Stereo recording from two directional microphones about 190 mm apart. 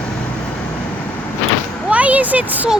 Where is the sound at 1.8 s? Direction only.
5° right (ahead or behind).